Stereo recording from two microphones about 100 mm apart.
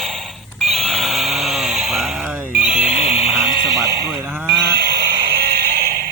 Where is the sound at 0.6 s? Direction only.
Centre (ahead or behind).